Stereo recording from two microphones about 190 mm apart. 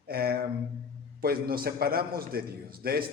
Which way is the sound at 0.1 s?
55° right (ahead or behind).